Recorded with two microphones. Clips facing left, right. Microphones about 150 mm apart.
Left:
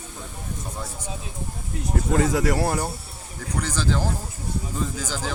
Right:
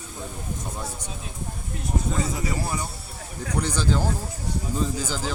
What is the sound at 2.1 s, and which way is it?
Speech, 80° left.